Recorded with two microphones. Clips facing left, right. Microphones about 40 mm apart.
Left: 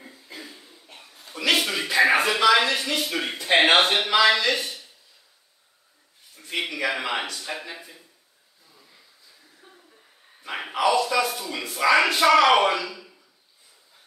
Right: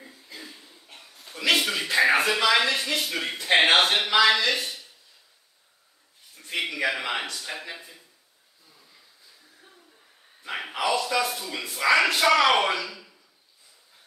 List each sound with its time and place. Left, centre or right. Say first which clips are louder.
1.1 s a sound: left 1 dB; centre
2.0 s speech: left 2 dB; left
2.2 s speech: left 3 dB; centre
7.0 s speech: left 2 dB; centre
9.6 s a sound: left 5 dB; centre
11.1 s speech: left 2 dB; centre